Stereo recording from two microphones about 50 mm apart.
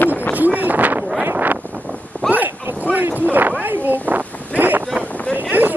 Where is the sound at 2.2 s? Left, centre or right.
Centre.